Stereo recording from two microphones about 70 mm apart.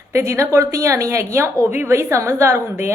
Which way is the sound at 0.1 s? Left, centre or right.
Right.